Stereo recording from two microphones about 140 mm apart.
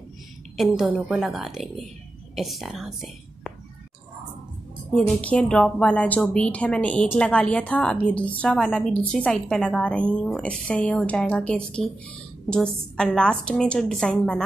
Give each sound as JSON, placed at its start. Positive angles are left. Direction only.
{"t": 0.6, "sound": "a woman's voice", "side_deg": 0}
{"t": 4.9, "sound": "a woman's voice", "side_deg": 10}